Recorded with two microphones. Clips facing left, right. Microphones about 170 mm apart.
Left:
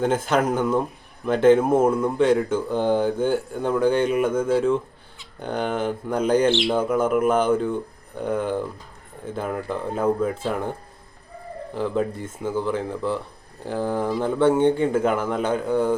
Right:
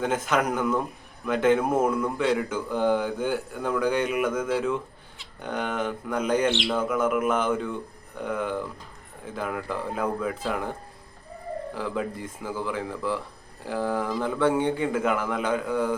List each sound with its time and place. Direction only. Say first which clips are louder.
0.0 s speech: left 4 dB; 30° left (ahead or behind)
11.7 s speech: left 8 dB; 25° left (ahead or behind)